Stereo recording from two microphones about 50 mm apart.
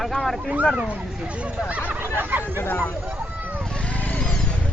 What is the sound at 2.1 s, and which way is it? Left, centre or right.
Speech, right.